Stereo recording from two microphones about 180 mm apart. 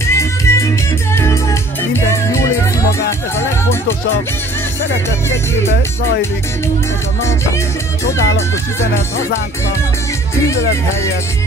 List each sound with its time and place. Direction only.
0.0 s music: 15° left (ahead or behind)